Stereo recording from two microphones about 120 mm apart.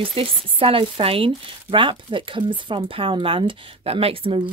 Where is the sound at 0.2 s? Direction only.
50° right (ahead or behind).